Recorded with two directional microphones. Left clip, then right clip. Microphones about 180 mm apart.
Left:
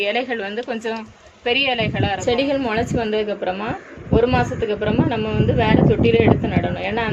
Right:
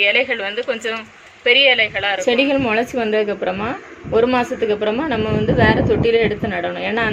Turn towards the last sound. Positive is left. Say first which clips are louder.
# right 3 dB
turn(degrees=-35)  # may be behind; listen again after turning